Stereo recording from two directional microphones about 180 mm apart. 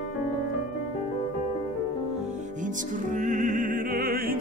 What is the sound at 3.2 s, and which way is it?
Opera, 45° right (ahead or behind).